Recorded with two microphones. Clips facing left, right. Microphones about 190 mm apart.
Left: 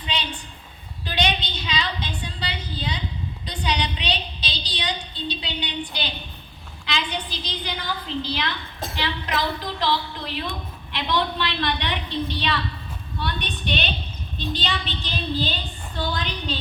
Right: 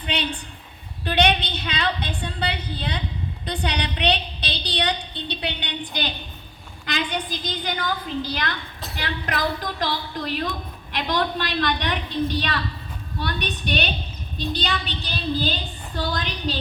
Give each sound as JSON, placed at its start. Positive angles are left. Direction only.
{"t": 0.0, "sound": "a sound", "side_deg": -60}
{"t": 1.0, "sound": "a woman's voice", "side_deg": -60}
{"t": 6.8, "sound": "a woman's voice", "side_deg": -45}